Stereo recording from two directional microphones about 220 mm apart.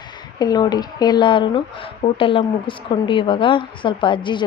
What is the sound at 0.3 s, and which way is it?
Speech, 15° left (ahead or behind).